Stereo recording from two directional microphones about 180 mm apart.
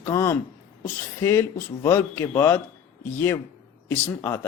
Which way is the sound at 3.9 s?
10° left (ahead or behind).